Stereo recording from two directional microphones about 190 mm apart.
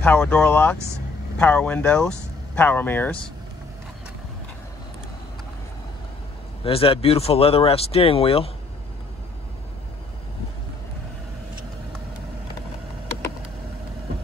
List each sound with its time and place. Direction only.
0.0 s speech: 5° left (ahead or behind)
6.6 s speech: 30° left (ahead or behind)